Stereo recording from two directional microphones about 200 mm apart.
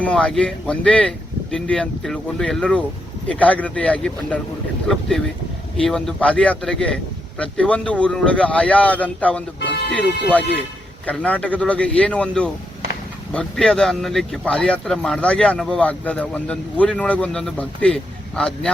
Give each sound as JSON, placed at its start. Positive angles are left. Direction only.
{"t": 0.0, "sound": "a man's voice", "side_deg": 5}
{"t": 9.6, "sound": "a sound", "side_deg": 55}
{"t": 9.9, "sound": "a man's voice", "side_deg": 5}